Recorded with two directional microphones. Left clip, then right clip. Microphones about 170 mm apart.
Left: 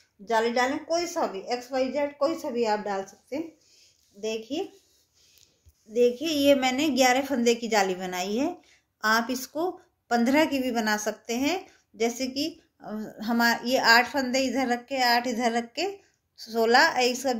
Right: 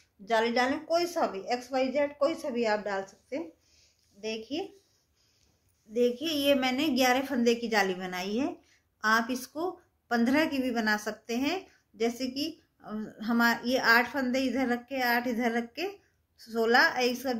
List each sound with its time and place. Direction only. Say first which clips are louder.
0.2 s speech: left 2 dB; 35° left (ahead or behind)
5.9 s a woman's voice: left 5 dB; 40° left (ahead or behind)